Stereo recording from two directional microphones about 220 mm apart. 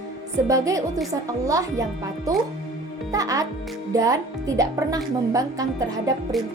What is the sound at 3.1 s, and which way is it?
A child's voice, 15° right (ahead or behind).